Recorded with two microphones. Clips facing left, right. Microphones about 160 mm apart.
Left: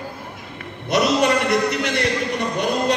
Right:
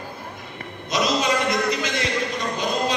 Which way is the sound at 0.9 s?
65° left (ahead or behind).